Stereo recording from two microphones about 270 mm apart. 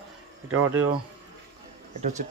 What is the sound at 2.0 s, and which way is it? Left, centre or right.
Speech, right.